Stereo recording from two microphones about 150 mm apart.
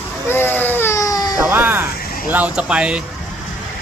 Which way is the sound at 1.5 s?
15° right (ahead or behind).